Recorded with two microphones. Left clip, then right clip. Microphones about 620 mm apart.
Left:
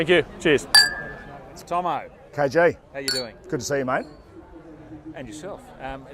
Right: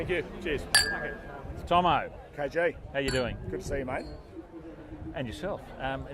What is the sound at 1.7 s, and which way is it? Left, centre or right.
Speech, right.